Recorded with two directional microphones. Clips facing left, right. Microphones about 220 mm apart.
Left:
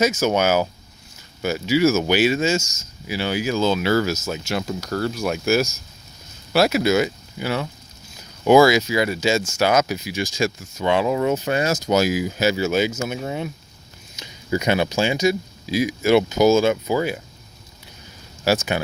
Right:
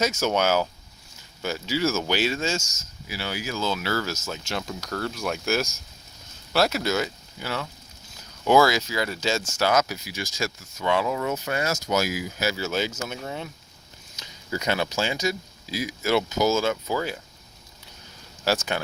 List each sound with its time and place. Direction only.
0.0 s speech: 5° left (ahead or behind)
3.1 s speech: 20° left (ahead or behind)
18.4 s speech: 10° left (ahead or behind)